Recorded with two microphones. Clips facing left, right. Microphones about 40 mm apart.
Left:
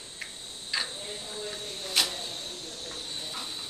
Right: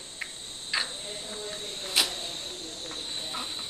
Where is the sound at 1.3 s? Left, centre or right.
Right.